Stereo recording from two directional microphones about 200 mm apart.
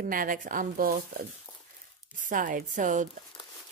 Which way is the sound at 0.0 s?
45° right (ahead or behind).